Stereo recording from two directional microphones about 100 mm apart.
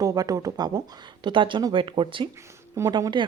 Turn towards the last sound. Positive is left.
turn(degrees=-55)  # may be behind; listen again after turning